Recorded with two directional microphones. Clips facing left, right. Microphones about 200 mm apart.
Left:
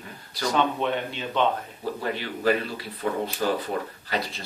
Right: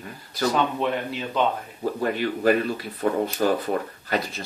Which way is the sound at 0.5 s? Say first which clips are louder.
Left 3 dB; centre (ahead or behind).